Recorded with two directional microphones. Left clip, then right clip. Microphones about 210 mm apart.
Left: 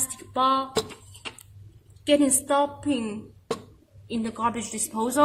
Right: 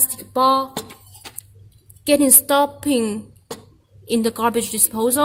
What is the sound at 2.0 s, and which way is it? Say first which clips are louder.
A woman's voice: right 5 dB; 40° right (ahead or behind).